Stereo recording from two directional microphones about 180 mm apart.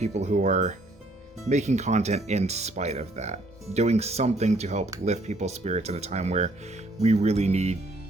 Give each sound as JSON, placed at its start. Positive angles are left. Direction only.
{"t": 0.0, "sound": "speech", "side_deg": -40}